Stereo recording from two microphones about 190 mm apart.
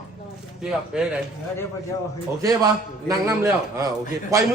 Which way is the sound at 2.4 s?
20° right (ahead or behind).